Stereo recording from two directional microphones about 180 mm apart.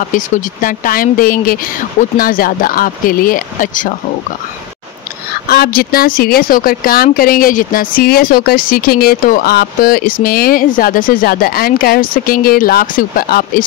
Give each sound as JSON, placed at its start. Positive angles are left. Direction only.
{"t": 0.1, "sound": "speech", "side_deg": 50}
{"t": 5.5, "sound": "speech", "side_deg": 55}